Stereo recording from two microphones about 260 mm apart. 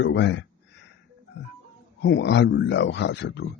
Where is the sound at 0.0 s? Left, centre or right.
Left.